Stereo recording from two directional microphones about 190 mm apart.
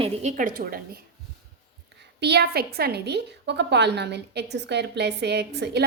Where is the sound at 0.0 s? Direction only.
35° right (ahead or behind).